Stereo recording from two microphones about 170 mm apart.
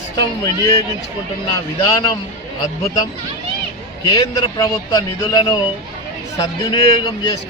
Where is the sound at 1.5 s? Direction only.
25° left (ahead or behind).